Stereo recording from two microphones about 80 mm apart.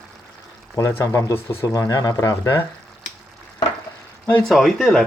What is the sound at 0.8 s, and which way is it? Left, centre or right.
Speech, left.